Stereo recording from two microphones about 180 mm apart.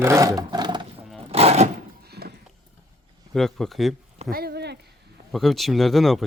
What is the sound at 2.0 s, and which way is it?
Clip-clop, 60° right (ahead or behind).